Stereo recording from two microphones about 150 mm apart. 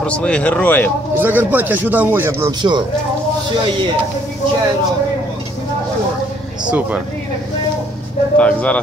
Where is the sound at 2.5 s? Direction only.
30° right (ahead or behind).